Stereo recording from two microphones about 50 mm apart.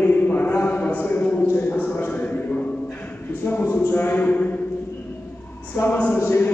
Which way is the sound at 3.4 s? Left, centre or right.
Left.